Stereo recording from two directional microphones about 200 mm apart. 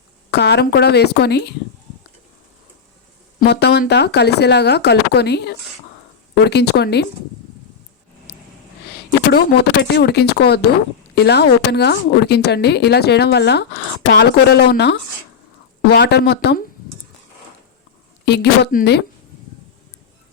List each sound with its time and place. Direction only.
0.3 s a woman's voice: 55° left (ahead or behind)
3.4 s a woman's voice: 55° left (ahead or behind)
9.3 s a woman's voice: 55° left (ahead or behind)
18.3 s a woman's voice: 55° left (ahead or behind)